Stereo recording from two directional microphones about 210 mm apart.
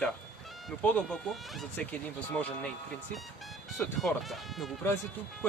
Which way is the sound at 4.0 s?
Centre (ahead or behind).